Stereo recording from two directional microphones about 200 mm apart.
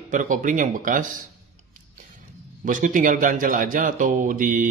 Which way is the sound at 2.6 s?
40° right (ahead or behind).